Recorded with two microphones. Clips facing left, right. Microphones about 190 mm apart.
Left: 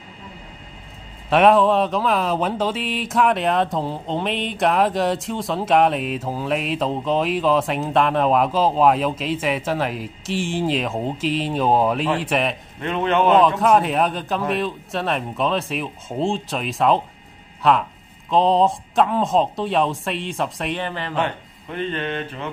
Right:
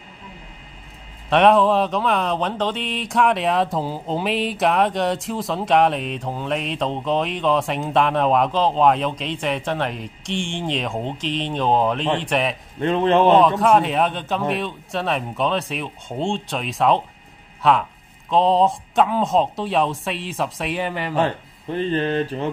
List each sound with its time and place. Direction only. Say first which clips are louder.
1.3 s speech: even; centre (ahead or behind)
12.8 s speech: right 3 dB; 30° right (ahead or behind)
13.3 s speech: left 3 dB; centre (ahead or behind)
21.2 s speech: right 3 dB; 35° right (ahead or behind)